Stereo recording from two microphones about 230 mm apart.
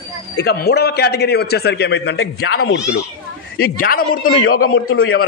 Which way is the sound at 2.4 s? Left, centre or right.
Left.